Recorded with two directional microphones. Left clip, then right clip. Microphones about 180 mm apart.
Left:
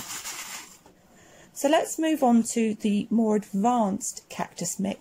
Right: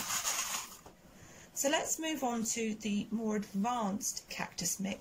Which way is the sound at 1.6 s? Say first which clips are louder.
Left 10 dB; 45° left (ahead or behind).